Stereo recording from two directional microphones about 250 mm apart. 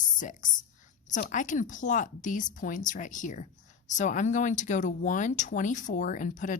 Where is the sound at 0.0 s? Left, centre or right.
Left.